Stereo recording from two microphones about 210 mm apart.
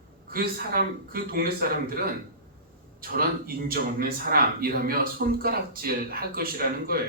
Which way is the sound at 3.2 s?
45° right (ahead or behind).